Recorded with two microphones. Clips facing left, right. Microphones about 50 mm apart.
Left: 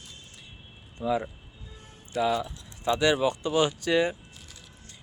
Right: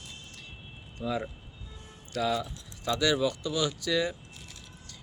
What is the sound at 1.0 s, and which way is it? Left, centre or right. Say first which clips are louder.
Speech: left 5 dB; left.